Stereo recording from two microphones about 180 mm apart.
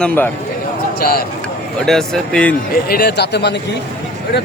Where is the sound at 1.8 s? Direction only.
Centre (ahead or behind).